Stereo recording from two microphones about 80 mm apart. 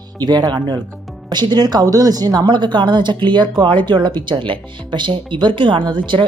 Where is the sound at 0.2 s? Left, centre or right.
Right.